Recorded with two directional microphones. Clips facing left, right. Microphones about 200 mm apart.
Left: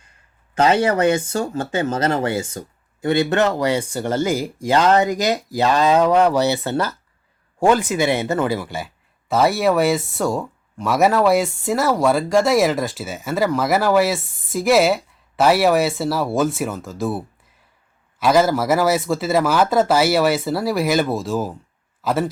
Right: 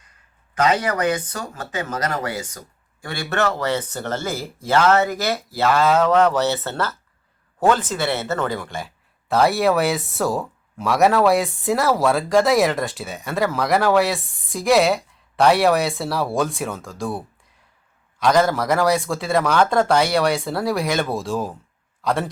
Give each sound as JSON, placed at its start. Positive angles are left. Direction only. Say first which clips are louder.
{"t": 0.5, "sound": "a man's voice", "louder": "left 4 dB", "side_deg": 25}